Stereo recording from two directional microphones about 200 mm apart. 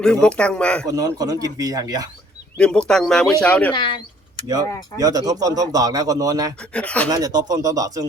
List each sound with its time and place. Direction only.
0.0 s speech: 5° left (ahead or behind)
0.9 s speech: 20° right (ahead or behind)
2.6 s speech: 5° left (ahead or behind)
3.7 s speech: 25° left (ahead or behind)
4.9 s speech: 20° right (ahead or behind)
6.6 s speech: 5° left (ahead or behind)
7.1 s speech: 20° right (ahead or behind)